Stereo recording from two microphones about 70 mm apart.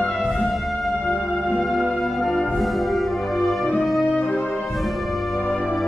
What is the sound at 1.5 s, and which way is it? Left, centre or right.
Music, centre.